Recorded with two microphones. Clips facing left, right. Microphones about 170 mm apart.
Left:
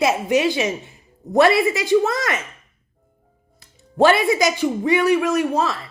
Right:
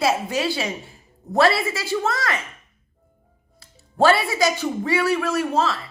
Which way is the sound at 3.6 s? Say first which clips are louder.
Left 3 dB; 20° left (ahead or behind).